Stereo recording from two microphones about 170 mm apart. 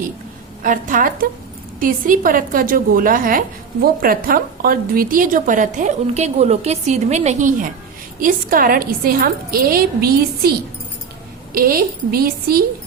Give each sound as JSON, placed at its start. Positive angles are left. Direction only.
{"t": 0.6, "sound": "a woman's voice", "side_deg": -55}
{"t": 11.5, "sound": "a woman's voice", "side_deg": -60}